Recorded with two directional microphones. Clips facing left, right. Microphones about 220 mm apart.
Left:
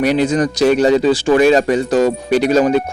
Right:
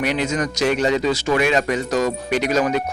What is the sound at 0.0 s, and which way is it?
Speech, 35° left (ahead or behind).